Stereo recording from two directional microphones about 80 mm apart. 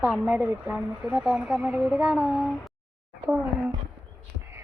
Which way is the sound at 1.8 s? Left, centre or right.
Centre.